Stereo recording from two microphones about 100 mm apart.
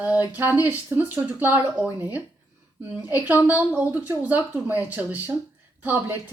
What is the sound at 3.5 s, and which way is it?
Speech, 15° right (ahead or behind).